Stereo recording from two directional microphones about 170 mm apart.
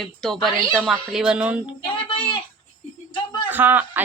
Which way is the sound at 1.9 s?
30° left (ahead or behind).